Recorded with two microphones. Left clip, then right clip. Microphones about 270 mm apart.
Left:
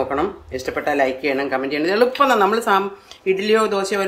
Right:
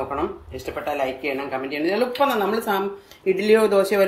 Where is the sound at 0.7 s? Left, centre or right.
Centre.